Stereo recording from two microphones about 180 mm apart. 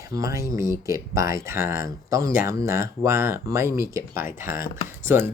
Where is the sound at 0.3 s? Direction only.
15° right (ahead or behind).